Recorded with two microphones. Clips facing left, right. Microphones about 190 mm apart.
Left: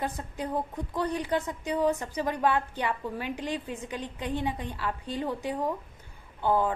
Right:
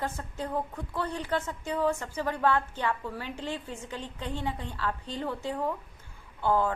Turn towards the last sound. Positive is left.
turn(degrees=15)  # may be behind; listen again after turning